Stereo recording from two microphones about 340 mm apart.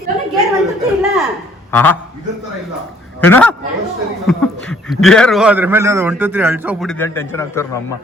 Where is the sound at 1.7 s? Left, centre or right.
Centre.